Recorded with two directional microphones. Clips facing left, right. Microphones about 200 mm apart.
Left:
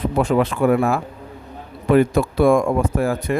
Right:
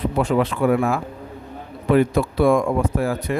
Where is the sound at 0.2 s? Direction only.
45° left (ahead or behind).